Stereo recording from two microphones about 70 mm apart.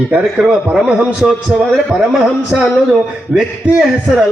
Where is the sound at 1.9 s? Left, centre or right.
Centre.